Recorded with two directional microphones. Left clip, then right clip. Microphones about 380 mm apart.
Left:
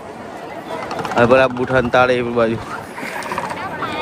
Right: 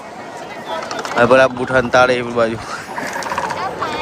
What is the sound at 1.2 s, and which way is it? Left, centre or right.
A man's voice, centre.